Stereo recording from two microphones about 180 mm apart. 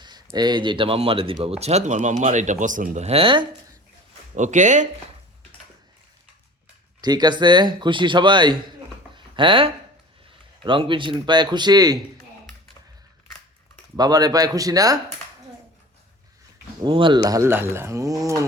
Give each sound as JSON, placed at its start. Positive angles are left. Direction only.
{"t": 0.3, "sound": "speech", "side_deg": -25}
{"t": 4.4, "sound": "speech", "side_deg": -40}
{"t": 7.0, "sound": "speech", "side_deg": -20}
{"t": 9.1, "sound": "a sound", "side_deg": -25}
{"t": 10.6, "sound": "speech", "side_deg": -30}
{"t": 13.9, "sound": "speech", "side_deg": -20}
{"t": 16.8, "sound": "speech", "side_deg": -25}